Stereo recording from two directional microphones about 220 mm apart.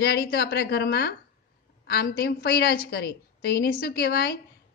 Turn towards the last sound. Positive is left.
turn(degrees=45)  # may be behind; listen again after turning